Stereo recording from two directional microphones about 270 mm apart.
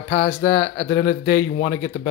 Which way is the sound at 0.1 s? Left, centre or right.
Left.